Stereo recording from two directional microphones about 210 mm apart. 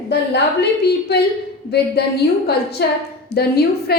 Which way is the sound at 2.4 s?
50° left (ahead or behind).